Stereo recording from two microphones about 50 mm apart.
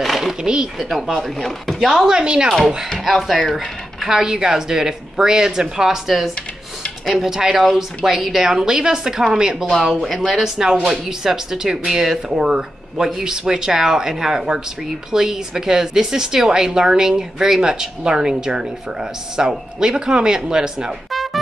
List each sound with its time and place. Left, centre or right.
0.0 s speech: centre
0.7 s speech: centre
2.0 s a woman's voice: centre
3.1 s speech: centre
4.1 s a woman's voice: centre
9.7 s a woman's voice: centre
21.1 s music: centre